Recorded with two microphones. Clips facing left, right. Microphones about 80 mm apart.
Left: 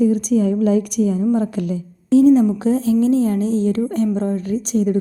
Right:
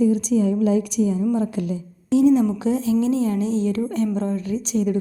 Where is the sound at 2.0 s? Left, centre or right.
Left.